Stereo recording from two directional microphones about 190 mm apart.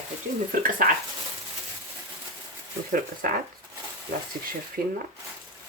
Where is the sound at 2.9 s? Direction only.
50° right (ahead or behind).